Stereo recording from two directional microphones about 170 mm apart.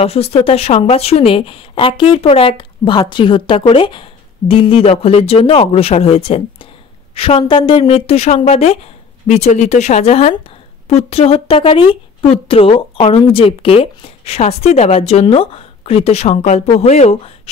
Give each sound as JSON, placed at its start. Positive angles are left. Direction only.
{"t": 0.0, "sound": "a woman's voice", "side_deg": 35}